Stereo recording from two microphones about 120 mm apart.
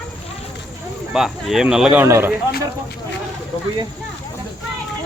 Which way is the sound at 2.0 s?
20° right (ahead or behind).